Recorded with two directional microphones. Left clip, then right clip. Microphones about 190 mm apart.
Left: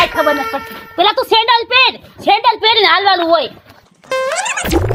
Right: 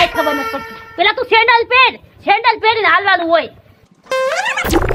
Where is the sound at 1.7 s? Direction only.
60° left (ahead or behind).